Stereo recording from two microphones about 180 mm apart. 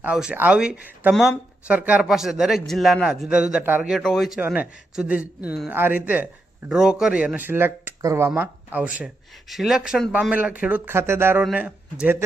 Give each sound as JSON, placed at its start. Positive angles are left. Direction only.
{"t": 0.0, "sound": "a man's voice", "side_deg": -5}